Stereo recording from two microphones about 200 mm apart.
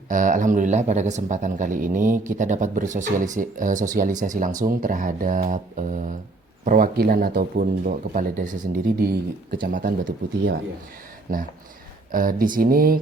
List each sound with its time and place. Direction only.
0.1 s speech: 40° right (ahead or behind)
11.3 s speech: 45° right (ahead or behind)